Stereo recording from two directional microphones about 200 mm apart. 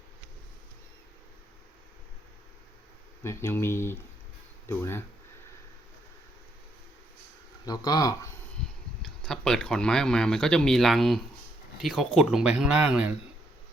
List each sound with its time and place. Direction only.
3.2 s speech: 15° left (ahead or behind)
7.6 s speech: 20° left (ahead or behind)
9.0 s speech: centre (ahead or behind)